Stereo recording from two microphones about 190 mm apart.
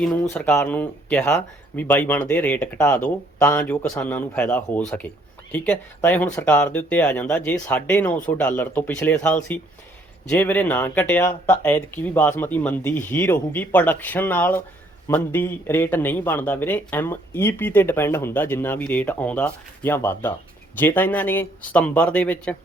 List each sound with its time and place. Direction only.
0.0 s a man's voice: 5° left (ahead or behind)